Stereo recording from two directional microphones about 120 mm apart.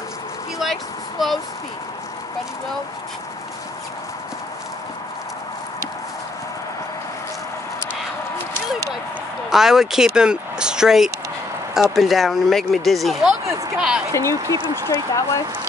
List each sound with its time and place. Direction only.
1.2 s speech: centre (ahead or behind)
9.5 s speech: 5° right (ahead or behind)
14.1 s speech: 25° left (ahead or behind)
14.6 s speech: 30° right (ahead or behind)
14.9 s speech: 25° left (ahead or behind)